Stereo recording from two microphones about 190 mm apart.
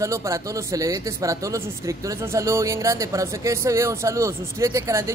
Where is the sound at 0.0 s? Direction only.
15° right (ahead or behind).